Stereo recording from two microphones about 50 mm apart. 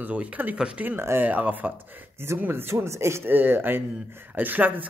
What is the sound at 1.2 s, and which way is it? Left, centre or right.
Speech, right.